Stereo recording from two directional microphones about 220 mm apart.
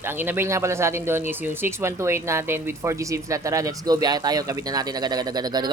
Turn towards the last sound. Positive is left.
turn(degrees=-20)  # may be behind; listen again after turning